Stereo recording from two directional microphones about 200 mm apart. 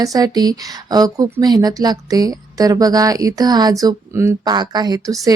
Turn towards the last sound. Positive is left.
turn(degrees=-20)  # may be behind; listen again after turning